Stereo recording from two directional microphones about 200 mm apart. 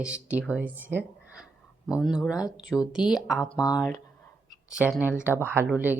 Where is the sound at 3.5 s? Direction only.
20° left (ahead or behind).